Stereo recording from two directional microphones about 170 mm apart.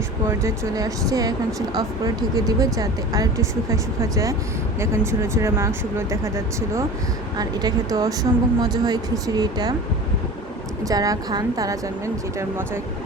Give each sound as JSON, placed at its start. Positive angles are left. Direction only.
{"t": 0.3, "sound": "speech", "side_deg": -15}
{"t": 10.8, "sound": "speech", "side_deg": -20}